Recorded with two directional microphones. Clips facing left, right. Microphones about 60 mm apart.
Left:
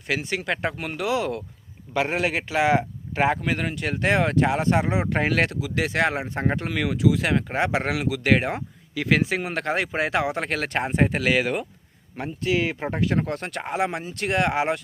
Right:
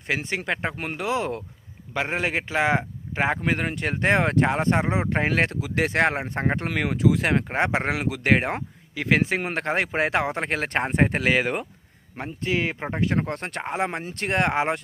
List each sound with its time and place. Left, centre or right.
0.1 s speech: right
0.4 s a man's voice: centre
0.8 s a man's voice: right
5.5 s a man's voice: right
9.2 s a man's voice: right
10.7 s a man's voice: right